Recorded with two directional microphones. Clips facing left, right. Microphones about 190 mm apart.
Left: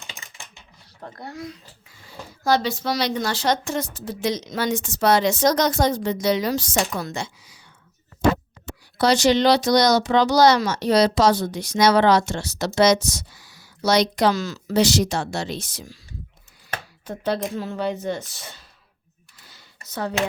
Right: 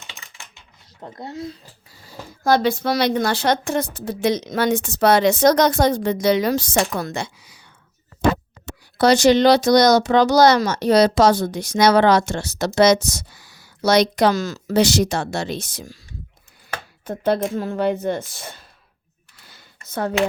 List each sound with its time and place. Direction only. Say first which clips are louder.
1.0 s speech: right 3 dB; 25° right (ahead or behind)
1.9 s speech: right 2 dB; 45° right (ahead or behind)
17.1 s speech: right 5 dB; 50° right (ahead or behind)
19.5 s a sound: right 1 dB; 55° right (ahead or behind)